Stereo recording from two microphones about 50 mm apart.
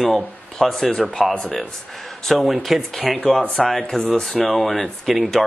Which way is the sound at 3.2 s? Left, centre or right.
Left.